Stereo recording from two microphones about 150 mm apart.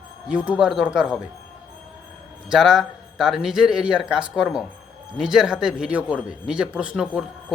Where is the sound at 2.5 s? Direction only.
5° right (ahead or behind).